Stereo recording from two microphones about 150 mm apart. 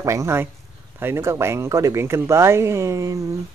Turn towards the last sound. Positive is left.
turn(degrees=-20)  # may be behind; listen again after turning